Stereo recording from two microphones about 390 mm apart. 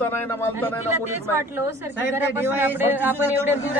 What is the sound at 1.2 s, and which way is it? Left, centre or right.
A woman's voice, centre.